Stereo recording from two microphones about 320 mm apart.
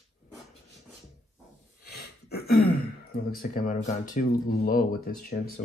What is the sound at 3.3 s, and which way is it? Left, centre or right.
Speech, left.